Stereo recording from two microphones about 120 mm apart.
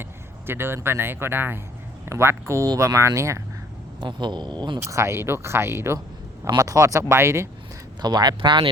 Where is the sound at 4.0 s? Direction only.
40° right (ahead or behind).